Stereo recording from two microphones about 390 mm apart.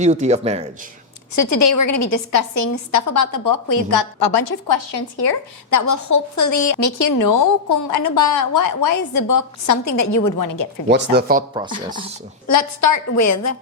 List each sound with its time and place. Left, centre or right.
0.0 s speech: centre
1.4 s a woman's voice: left
5.7 s a woman's voice: left
10.8 s speech: right
12.5 s a woman's voice: left